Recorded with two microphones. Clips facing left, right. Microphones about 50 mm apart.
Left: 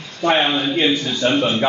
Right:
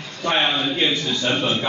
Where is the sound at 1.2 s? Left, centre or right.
Left.